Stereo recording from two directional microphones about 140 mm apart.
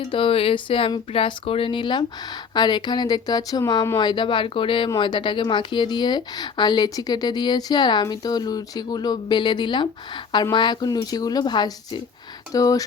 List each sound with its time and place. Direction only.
0.1 s speech: 40° left (ahead or behind)